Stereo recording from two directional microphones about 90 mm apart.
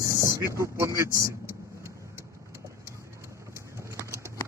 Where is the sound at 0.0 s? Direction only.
35° right (ahead or behind).